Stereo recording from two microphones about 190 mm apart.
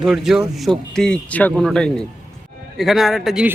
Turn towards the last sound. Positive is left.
turn(degrees=-5)  # may be behind; listen again after turning